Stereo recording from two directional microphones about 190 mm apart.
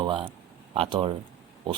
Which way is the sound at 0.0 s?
30° right (ahead or behind).